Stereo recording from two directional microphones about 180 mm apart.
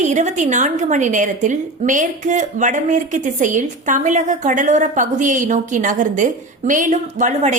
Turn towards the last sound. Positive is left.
turn(degrees=-40)  # may be behind; listen again after turning